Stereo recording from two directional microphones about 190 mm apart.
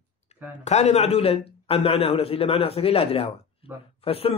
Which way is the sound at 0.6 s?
35° left (ahead or behind).